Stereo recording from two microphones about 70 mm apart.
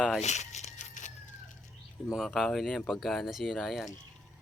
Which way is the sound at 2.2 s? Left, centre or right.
Centre.